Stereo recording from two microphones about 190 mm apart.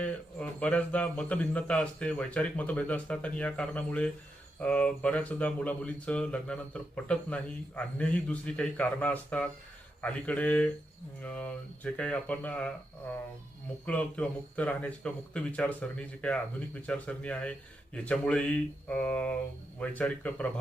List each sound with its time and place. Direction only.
0.0 s speech: 5° left (ahead or behind)
13.8 s speech: 5° left (ahead or behind)